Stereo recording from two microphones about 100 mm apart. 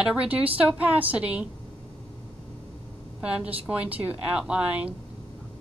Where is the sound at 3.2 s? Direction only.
10° right (ahead or behind).